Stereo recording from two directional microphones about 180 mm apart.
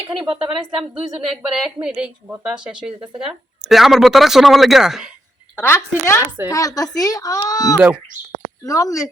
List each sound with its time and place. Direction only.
0.2 s speech: 30° right (ahead or behind)
0.7 s a woman's voice: 5° right (ahead or behind)
5.5 s a woman's voice: 15° left (ahead or behind)